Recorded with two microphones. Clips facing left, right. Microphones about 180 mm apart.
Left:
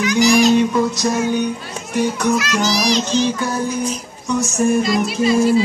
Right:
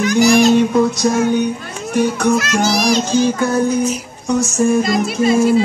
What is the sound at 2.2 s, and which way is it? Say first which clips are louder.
Music: right 3 dB; 50° right (ahead or behind).